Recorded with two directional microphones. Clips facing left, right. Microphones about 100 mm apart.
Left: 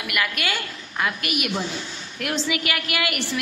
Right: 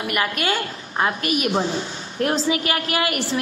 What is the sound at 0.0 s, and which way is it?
A woman's voice, 35° right (ahead or behind).